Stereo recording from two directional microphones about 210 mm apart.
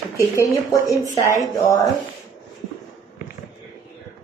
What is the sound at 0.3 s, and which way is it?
Speech, 15° left (ahead or behind).